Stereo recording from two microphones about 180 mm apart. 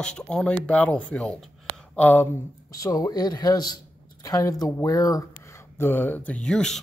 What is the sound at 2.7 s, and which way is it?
A man's voice, 20° left (ahead or behind).